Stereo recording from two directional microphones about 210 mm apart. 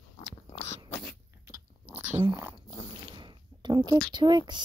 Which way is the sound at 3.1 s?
20° right (ahead or behind).